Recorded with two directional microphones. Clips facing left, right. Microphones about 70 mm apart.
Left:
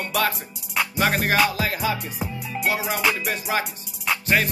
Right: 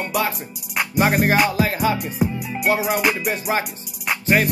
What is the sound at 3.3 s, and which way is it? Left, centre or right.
Music, right.